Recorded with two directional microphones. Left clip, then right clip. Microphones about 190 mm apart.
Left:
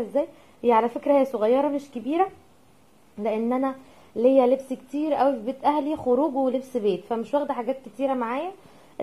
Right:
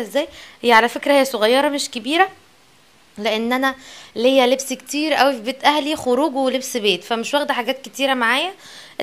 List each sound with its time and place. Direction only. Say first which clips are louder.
0.0 s a woman's voice: right 4 dB; 20° right (ahead or behind)
5.9 s speech: right 4 dB; 40° right (ahead or behind)
6.4 s a woman's voice: right 5 dB; 15° right (ahead or behind)